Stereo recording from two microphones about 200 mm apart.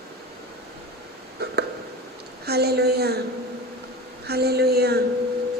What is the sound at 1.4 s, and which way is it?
Hiccup, 55° right (ahead or behind).